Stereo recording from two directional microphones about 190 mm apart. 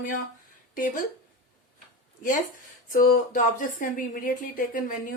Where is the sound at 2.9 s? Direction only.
45° left (ahead or behind).